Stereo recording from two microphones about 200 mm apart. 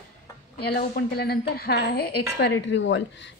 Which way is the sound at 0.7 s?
50° left (ahead or behind).